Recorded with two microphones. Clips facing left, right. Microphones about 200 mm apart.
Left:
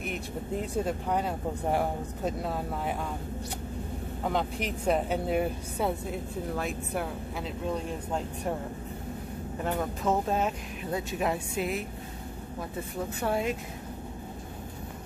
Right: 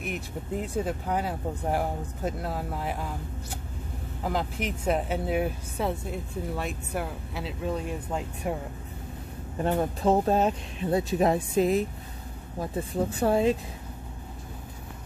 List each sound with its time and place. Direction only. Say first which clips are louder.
0.0 s speech: even; centre (ahead or behind)
4.2 s speech: right 1 dB; centre (ahead or behind)
9.7 s speech: right 5 dB; 30° right (ahead or behind)
13.1 s speech: right 6 dB; 30° right (ahead or behind)